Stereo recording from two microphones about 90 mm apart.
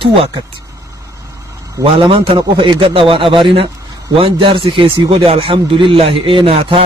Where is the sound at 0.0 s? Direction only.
90° right.